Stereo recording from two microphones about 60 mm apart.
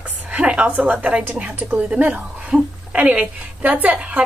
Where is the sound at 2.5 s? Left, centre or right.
Centre.